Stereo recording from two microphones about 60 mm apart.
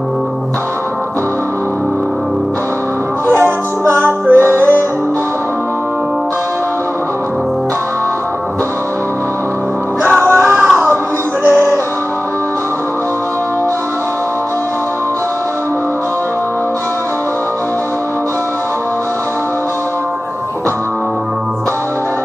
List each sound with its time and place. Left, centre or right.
3.3 s music: right
10.2 s music: right
11.4 s music: left